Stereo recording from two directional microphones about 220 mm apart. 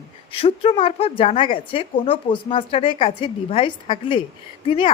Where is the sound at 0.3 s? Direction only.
25° left (ahead or behind).